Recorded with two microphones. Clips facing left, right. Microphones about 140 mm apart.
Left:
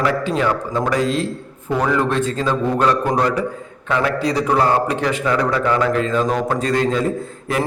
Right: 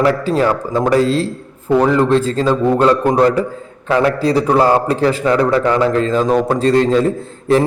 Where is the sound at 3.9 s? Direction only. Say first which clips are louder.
Right 5 dB; 30° right (ahead or behind).